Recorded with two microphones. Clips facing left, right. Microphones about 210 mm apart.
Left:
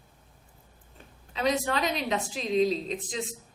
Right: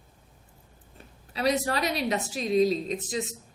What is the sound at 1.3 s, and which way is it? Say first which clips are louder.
A woman's voice: right 1 dB; 35° right (ahead or behind).